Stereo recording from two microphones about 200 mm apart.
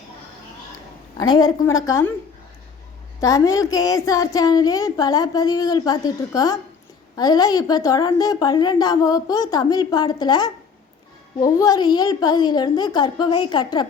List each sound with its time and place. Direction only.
1.6 s a woman's voice: 15° left (ahead or behind)
3.2 s a woman's voice: 15° left (ahead or behind)